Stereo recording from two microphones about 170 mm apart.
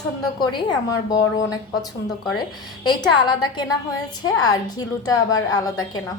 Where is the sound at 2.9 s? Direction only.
25° left (ahead or behind).